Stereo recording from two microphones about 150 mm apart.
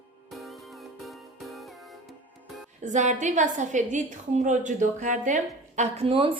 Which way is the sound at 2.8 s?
55° right (ahead or behind).